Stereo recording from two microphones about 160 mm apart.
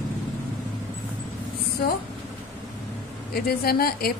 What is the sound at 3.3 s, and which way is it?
Speech, 75° left (ahead or behind).